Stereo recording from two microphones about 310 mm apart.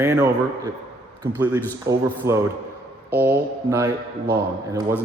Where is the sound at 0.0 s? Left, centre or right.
Centre.